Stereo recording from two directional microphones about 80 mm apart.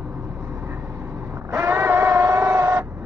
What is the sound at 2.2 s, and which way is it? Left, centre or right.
Printer, right.